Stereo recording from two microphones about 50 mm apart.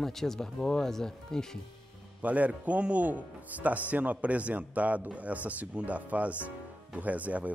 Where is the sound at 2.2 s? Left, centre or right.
Right.